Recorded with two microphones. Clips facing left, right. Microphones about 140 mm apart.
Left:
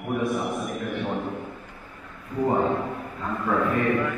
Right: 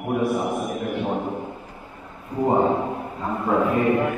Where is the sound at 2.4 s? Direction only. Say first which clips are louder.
Right 3 dB; 25° right (ahead or behind).